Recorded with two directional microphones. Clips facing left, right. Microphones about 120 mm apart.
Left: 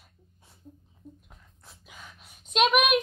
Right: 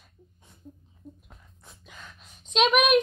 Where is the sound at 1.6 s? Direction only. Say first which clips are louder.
Right 1 dB; 5° left (ahead or behind).